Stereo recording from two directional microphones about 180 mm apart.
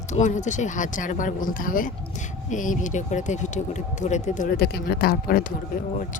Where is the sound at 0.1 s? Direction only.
40° left (ahead or behind).